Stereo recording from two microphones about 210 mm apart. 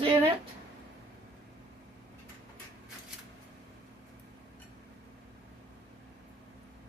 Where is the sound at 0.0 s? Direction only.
25° right (ahead or behind).